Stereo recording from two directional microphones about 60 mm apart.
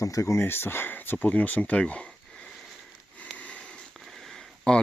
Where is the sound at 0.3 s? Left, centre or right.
Left; by 2.0 s centre.